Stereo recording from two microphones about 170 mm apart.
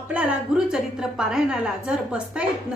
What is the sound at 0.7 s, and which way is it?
A woman's voice, 5° right (ahead or behind).